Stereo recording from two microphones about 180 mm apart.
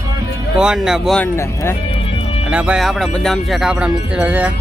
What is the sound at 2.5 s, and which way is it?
Speech, 5° right (ahead or behind).